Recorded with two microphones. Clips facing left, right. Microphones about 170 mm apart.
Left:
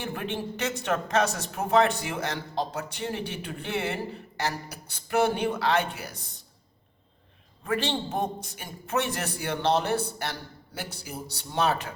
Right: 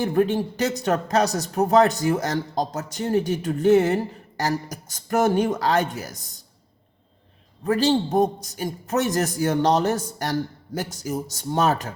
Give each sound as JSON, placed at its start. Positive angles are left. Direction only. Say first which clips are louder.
{"t": 0.0, "sound": "speech", "louder": "right 11 dB", "side_deg": -40}
{"t": 7.6, "sound": "speech", "louder": "right 8 dB", "side_deg": -40}